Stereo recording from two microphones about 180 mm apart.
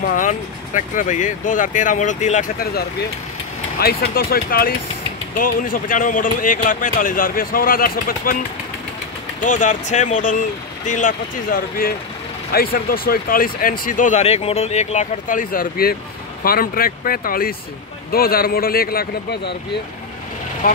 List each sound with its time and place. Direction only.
0.1 s a man's voice: 45° left (ahead or behind)
9.4 s a man's voice: 45° left (ahead or behind)
20.6 s speech: 50° left (ahead or behind)